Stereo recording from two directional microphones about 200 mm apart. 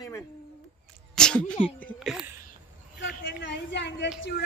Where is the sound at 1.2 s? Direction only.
5° left (ahead or behind).